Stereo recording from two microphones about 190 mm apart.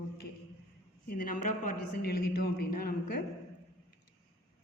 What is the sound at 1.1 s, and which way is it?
A man's voice, 45° left (ahead or behind).